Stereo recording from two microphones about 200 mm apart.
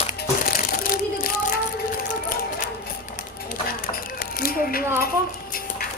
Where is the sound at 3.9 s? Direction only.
45° left (ahead or behind).